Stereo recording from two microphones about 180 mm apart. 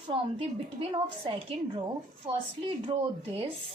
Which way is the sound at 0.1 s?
30° right (ahead or behind).